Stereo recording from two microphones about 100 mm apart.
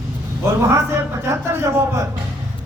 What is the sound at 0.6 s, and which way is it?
A man's voice, 25° right (ahead or behind).